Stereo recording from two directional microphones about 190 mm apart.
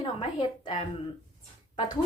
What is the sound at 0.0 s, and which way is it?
Speech, 25° left (ahead or behind).